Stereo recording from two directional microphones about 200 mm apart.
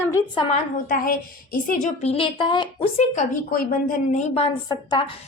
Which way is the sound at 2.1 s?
25° left (ahead or behind).